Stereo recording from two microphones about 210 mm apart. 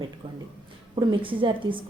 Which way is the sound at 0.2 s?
25° right (ahead or behind).